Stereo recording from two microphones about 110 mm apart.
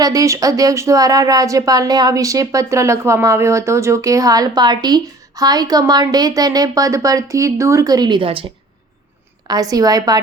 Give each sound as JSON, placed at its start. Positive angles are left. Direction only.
{"t": 0.0, "sound": "speech", "side_deg": -30}
{"t": 9.5, "sound": "speech", "side_deg": -35}